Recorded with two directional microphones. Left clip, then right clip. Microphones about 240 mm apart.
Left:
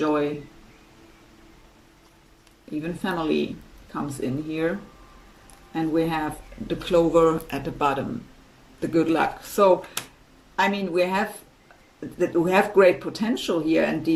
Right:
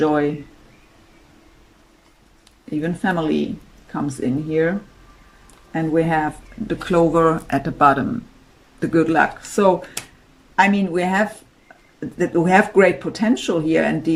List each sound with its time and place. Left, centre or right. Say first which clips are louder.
0.0 s speech: right 5 dB; right
3.0 s speech: right 3 dB; right
5.7 s speech: right 5 dB; right
12.2 s speech: right 5 dB; right